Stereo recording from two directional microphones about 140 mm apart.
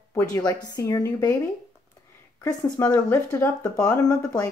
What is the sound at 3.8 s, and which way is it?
Speech, 25° left (ahead or behind).